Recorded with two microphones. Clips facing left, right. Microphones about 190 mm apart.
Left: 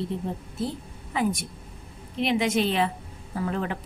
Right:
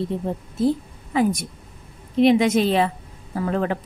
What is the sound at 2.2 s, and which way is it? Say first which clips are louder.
A woman's voice: right 8 dB; 40° right (ahead or behind).